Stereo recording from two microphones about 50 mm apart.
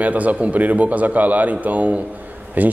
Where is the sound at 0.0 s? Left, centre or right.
Right.